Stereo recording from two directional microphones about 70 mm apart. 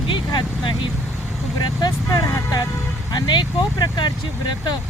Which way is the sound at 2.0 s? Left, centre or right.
Left.